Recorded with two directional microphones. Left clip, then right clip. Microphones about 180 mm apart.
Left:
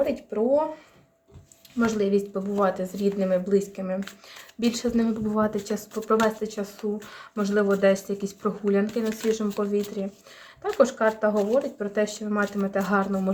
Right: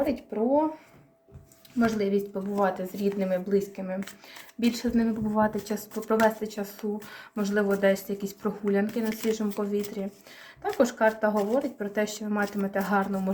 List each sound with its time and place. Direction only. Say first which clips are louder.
0.0 s speech: left 3 dB; 30° left (ahead or behind)
1.8 s speech: left 2 dB; 35° left (ahead or behind)
4.6 s speech: left 2 dB; 40° left (ahead or behind)